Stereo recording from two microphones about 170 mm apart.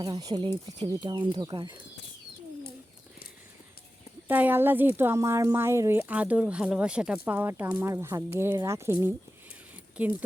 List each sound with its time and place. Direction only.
0.0 s speech: 20° right (ahead or behind)
4.3 s speech: 10° right (ahead or behind)